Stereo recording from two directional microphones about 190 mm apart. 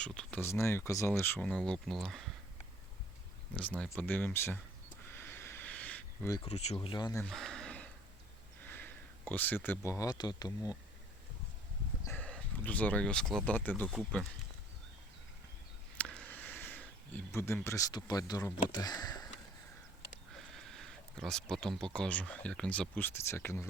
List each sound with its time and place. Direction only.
0.0 s speech: 5° left (ahead or behind)
3.5 s speech: 5° left (ahead or behind)
5.0 s a sound: 10° left (ahead or behind)
6.4 s speech: 35° left (ahead or behind)
6.8 s speech: 20° left (ahead or behind)
7.3 s a sound: centre (ahead or behind)
8.6 s speech: 10° left (ahead or behind)
12.0 s speech: 10° left (ahead or behind)
16.0 s speech: 5° left (ahead or behind)
20.3 s a sound: centre (ahead or behind)
21.5 s speech: centre (ahead or behind)